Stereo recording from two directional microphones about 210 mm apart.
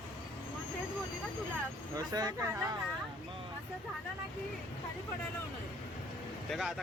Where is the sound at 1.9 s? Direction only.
15° right (ahead or behind).